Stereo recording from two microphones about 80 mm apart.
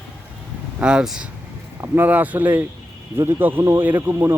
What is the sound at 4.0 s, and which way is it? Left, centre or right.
Speech, right.